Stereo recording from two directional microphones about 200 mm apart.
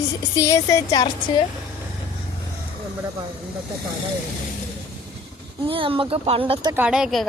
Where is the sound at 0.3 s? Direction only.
15° left (ahead or behind).